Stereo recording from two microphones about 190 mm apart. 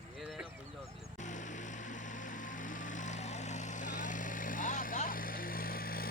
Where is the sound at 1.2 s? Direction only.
40° left (ahead or behind).